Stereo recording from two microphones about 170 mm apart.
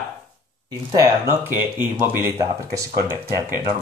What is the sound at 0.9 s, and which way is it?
Speech, 15° right (ahead or behind).